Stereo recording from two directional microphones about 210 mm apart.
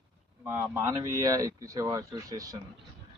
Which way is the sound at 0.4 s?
10° right (ahead or behind).